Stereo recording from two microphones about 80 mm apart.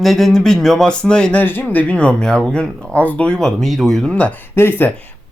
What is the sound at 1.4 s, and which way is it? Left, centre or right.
Speech, left.